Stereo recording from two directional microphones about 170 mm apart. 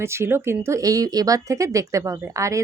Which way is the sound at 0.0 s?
15° right (ahead or behind).